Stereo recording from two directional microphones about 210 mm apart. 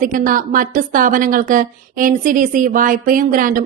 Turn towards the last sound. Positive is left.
turn(degrees=-40)  # may be behind; listen again after turning